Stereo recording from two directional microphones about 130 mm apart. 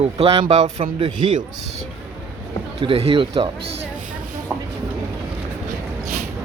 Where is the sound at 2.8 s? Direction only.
50° right (ahead or behind).